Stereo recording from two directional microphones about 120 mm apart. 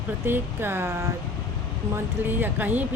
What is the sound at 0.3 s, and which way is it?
Speech, 20° right (ahead or behind).